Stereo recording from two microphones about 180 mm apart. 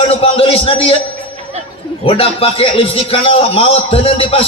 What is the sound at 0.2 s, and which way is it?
Speech, 30° left (ahead or behind).